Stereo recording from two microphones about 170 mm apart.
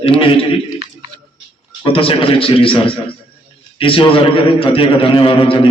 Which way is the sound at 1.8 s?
30° left (ahead or behind).